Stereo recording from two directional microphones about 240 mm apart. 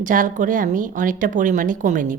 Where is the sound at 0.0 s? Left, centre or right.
Right.